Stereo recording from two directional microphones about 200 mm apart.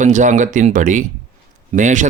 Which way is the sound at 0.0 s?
40° right (ahead or behind).